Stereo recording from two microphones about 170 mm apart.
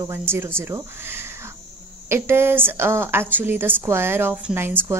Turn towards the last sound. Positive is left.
turn(degrees=-15)  # may be behind; listen again after turning